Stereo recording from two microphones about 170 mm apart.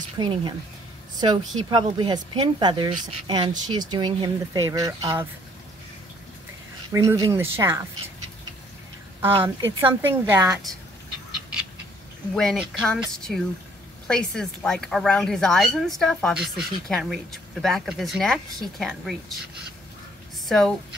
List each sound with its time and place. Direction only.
0.2 s speech: 25° right (ahead or behind)
6.9 s speech: 20° right (ahead or behind)
9.8 s speech: 15° right (ahead or behind)
12.4 s a woman's voice: centre (ahead or behind)
20.4 s speech: 5° left (ahead or behind)